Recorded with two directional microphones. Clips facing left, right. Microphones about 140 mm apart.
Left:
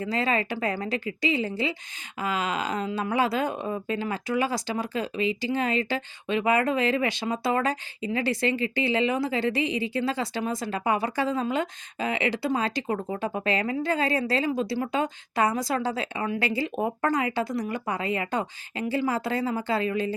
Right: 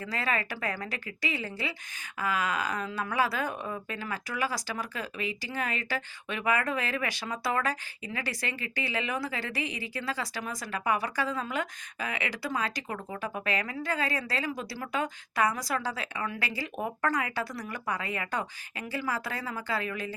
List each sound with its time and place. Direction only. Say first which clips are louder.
0.0 s speech: left 6 dB; 25° left (ahead or behind)